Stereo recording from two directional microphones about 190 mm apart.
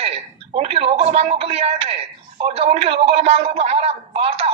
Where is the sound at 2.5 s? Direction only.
30° right (ahead or behind).